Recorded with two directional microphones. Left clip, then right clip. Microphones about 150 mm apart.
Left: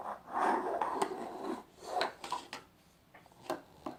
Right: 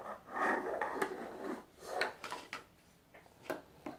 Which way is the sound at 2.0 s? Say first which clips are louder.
Left 3 dB; 10° left (ahead or behind).